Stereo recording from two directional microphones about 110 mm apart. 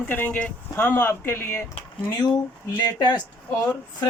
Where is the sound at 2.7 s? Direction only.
40° left (ahead or behind).